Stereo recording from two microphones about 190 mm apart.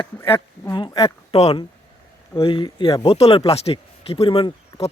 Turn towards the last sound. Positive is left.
turn(degrees=30)  # may be behind; listen again after turning